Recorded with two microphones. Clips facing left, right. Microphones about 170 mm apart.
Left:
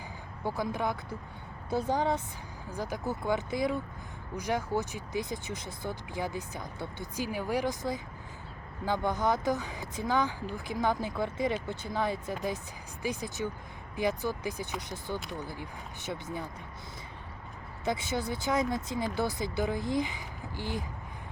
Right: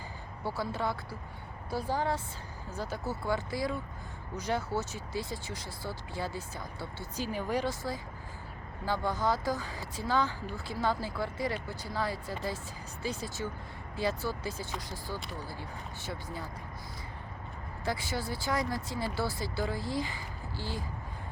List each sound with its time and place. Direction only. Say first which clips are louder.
0.4 s speech: left 2 dB; 15° left (ahead or behind)
17.8 s speech: left 3 dB; 20° left (ahead or behind)